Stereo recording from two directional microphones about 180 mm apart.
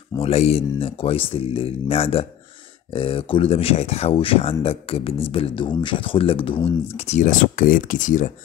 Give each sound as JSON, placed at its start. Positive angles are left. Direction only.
{"t": 0.2, "sound": "speech", "side_deg": 35}